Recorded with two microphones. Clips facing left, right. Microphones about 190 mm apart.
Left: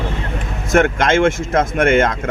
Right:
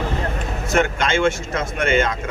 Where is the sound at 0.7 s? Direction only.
60° left (ahead or behind).